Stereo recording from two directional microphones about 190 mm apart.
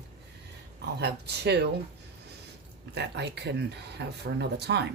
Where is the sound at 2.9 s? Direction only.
60° right (ahead or behind).